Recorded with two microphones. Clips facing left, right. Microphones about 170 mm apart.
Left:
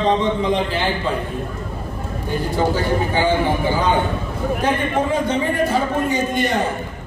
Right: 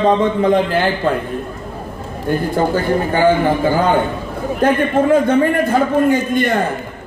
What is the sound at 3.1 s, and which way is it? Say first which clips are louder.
A man's voice: right 6 dB; 55° right (ahead or behind).